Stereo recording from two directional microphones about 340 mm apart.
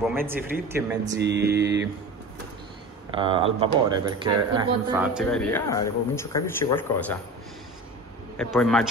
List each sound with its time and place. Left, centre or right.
0.1 s speech: centre
1.2 s mantra: right
3.2 s speech: centre
8.4 s speech: centre